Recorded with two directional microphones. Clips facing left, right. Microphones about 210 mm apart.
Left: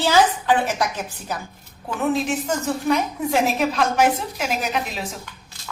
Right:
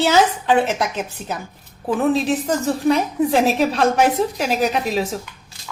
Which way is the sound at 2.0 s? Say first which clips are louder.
Right 3 dB; 35° right (ahead or behind).